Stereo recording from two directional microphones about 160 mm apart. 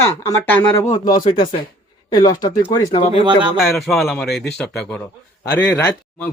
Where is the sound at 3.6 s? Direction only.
Centre (ahead or behind).